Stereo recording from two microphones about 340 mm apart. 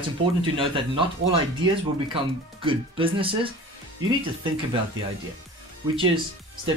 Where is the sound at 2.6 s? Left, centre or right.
Centre.